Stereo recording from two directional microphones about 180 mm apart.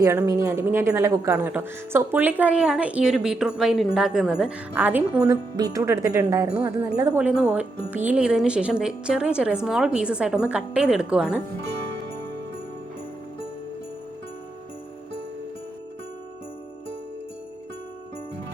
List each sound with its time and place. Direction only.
0.0 s speech: 15° right (ahead or behind)
7.2 s speech: 5° right (ahead or behind)